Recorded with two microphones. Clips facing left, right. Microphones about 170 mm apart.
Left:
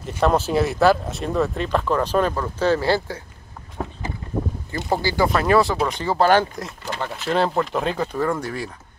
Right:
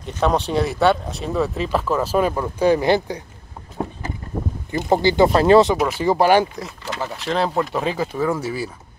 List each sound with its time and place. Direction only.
0.0 s speech: centre (ahead or behind); by 3.2 s 15° right (ahead or behind)
4.7 s speech: 20° right (ahead or behind)
5.9 s speech: 10° right (ahead or behind)
6.5 s speech: centre (ahead or behind)